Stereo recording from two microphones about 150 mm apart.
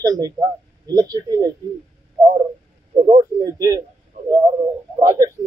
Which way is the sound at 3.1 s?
25° right (ahead or behind).